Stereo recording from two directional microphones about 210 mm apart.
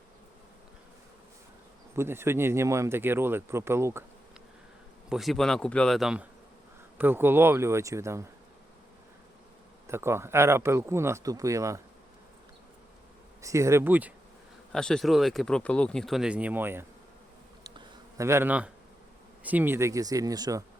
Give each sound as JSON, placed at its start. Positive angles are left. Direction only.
{"t": 2.0, "sound": "speech", "side_deg": -10}
{"t": 5.0, "sound": "speech", "side_deg": 0}
{"t": 9.8, "sound": "speech", "side_deg": -10}
{"t": 13.4, "sound": "speech", "side_deg": -15}
{"t": 14.7, "sound": "speech", "side_deg": 5}
{"t": 17.7, "sound": "a sound", "side_deg": -15}
{"t": 19.4, "sound": "speech", "side_deg": -10}